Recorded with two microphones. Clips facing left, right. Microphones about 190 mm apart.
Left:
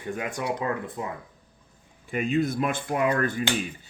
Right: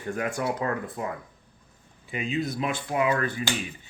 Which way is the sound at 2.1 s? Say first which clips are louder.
Left 4 dB; 50° left (ahead or behind).